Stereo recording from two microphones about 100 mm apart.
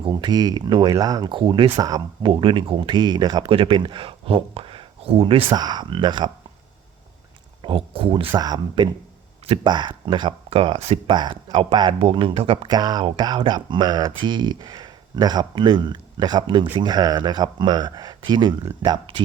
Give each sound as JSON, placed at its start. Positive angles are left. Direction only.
{"t": 0.0, "sound": "speech", "side_deg": -45}
{"t": 0.9, "sound": "speech", "side_deg": -40}
{"t": 1.3, "sound": "speech", "side_deg": -55}
{"t": 1.8, "sound": "speech", "side_deg": -40}
{"t": 2.3, "sound": "speech", "side_deg": -55}
{"t": 3.5, "sound": "speech", "side_deg": -60}
{"t": 5.5, "sound": "speech", "side_deg": -45}
{"t": 7.6, "sound": "speech", "side_deg": -60}
{"t": 8.4, "sound": "speech", "side_deg": -45}
{"t": 11.1, "sound": "speech", "side_deg": -50}
{"t": 11.9, "sound": "speech", "side_deg": -70}
{"t": 12.6, "sound": "speech", "side_deg": -45}